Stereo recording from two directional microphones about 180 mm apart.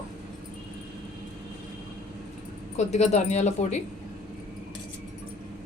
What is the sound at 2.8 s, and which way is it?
Speech, 40° left (ahead or behind).